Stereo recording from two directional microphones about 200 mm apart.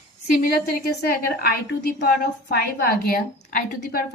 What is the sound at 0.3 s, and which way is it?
A woman's voice, 45° left (ahead or behind).